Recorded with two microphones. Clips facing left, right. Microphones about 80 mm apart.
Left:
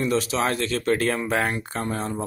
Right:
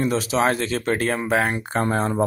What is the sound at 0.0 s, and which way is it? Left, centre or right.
Speech, right.